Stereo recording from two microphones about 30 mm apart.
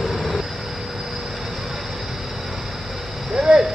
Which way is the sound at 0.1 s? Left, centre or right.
Centre.